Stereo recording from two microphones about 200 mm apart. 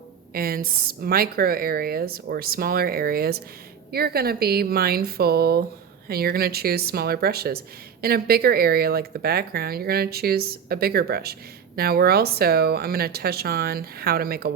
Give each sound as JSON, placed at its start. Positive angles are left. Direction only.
{"t": 0.3, "sound": "speech", "side_deg": -50}